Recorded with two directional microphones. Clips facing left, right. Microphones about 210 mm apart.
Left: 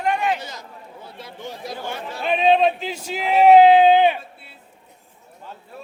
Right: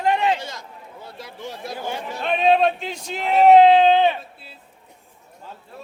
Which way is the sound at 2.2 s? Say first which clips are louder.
Left 1 dB; centre (ahead or behind).